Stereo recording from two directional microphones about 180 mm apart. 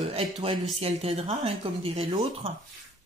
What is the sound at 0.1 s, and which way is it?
Speech, 35° right (ahead or behind).